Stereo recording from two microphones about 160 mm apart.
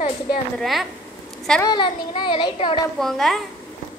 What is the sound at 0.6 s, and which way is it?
Speech, centre (ahead or behind).